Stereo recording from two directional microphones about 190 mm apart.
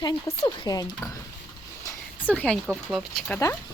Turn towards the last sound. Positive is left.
turn(degrees=10)  # may be behind; listen again after turning